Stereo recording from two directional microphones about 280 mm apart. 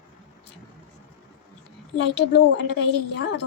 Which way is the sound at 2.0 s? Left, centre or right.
Left.